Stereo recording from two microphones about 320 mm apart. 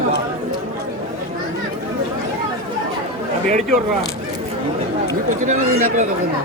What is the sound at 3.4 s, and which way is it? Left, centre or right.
Speech, right.